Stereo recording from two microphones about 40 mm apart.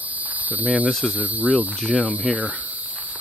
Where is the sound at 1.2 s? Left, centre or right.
Right.